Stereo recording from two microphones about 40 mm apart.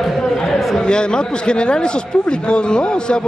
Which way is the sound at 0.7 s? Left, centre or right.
Left.